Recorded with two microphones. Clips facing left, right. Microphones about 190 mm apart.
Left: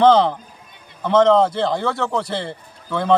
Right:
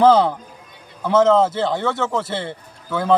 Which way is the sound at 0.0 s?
5° right (ahead or behind).